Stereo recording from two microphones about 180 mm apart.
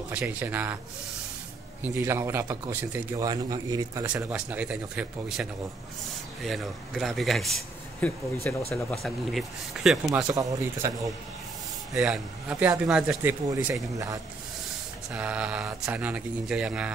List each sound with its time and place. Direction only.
0.1 s speech: 10° right (ahead or behind)
1.8 s speech: 15° right (ahead or behind)
4.0 s a man's voice: 10° right (ahead or behind)
10.3 s speech: 20° right (ahead or behind)
11.9 s speech: 5° right (ahead or behind)
15.1 s speech: 5° right (ahead or behind)